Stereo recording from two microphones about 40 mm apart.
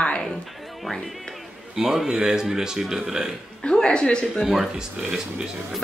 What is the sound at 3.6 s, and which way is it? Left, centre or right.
Speech, left.